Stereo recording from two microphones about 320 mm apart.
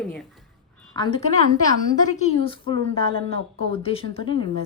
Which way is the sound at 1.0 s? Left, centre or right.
Centre.